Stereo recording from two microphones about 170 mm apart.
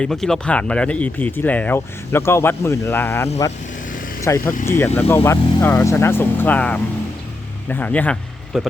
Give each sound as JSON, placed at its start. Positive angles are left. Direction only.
{"t": 0.0, "sound": "speech", "side_deg": 0}